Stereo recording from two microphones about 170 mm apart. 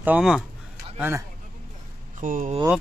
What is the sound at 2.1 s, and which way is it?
Speech, 50° right (ahead or behind).